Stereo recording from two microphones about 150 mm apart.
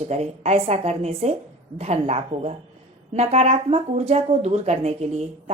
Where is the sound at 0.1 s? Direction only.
45° right (ahead or behind).